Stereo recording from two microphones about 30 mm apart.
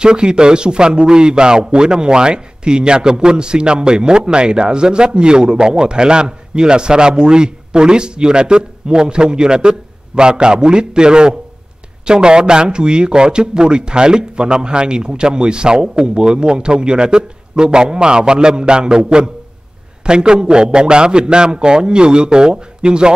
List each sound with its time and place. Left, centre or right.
0.0 s a man's voice: right